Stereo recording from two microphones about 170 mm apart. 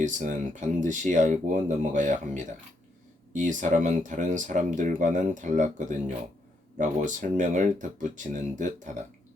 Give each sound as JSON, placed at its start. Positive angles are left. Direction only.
{"t": 0.0, "sound": "speech", "side_deg": -50}